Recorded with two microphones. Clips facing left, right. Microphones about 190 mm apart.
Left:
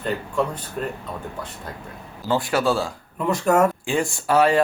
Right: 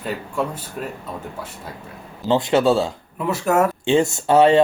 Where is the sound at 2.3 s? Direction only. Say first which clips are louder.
Right 4 dB; 20° right (ahead or behind).